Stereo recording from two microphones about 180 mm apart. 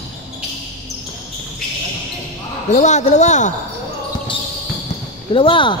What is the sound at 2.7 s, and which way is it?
Speech, 40° left (ahead or behind).